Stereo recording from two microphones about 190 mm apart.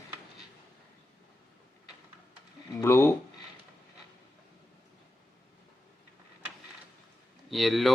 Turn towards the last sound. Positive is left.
turn(degrees=0)  # may be behind; listen again after turning